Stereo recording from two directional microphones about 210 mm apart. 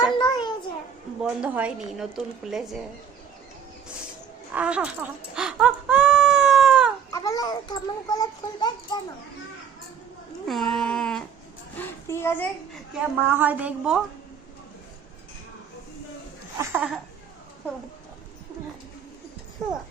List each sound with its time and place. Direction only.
0.0 s a sound: 20° left (ahead or behind)
1.2 s a woman's voice: 5° right (ahead or behind)
4.5 s a woman's voice: 5° right (ahead or behind)
5.3 s a sound: 5° right (ahead or behind)
7.1 s a child's voice: 15° left (ahead or behind)
10.4 s a woman's voice: centre (ahead or behind)
13.2 s a woman's voice: 10° right (ahead or behind)
16.6 s a woman's voice: 5° right (ahead or behind)